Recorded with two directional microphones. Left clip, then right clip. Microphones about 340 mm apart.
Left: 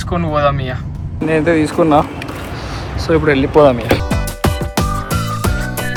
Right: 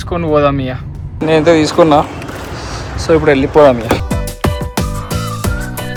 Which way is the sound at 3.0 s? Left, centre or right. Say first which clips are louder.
Right 3 dB; centre.